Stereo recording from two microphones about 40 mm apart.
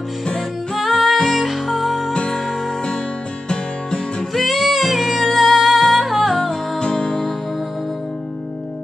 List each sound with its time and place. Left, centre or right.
0.7 s music: centre
2.1 s music: centre
4.3 s music: centre
6.8 s music: left